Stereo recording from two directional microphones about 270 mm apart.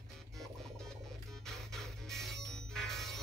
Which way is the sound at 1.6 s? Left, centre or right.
Centre.